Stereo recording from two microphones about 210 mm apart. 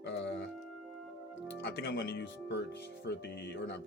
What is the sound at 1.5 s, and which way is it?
Speech, 50° left (ahead or behind).